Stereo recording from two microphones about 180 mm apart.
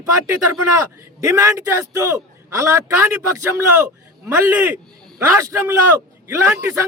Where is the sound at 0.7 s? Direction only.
15° right (ahead or behind).